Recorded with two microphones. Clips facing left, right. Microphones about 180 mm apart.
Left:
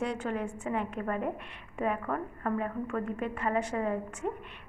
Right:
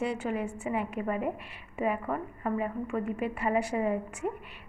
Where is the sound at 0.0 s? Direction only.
5° right (ahead or behind).